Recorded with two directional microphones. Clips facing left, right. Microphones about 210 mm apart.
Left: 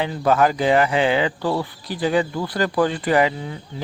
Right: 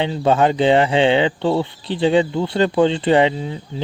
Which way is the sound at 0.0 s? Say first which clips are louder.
Right 2 dB; 25° right (ahead or behind).